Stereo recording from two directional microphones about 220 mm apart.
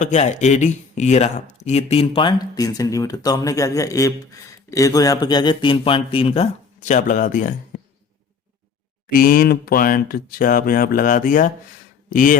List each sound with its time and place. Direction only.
0.0 s speech: 30° left (ahead or behind)
9.0 s speech: 40° left (ahead or behind)